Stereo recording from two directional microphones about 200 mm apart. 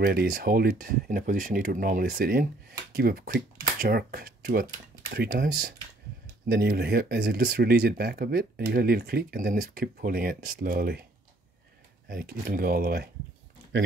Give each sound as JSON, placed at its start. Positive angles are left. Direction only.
{"t": 0.0, "sound": "speech", "side_deg": -50}
{"t": 12.1, "sound": "speech", "side_deg": -50}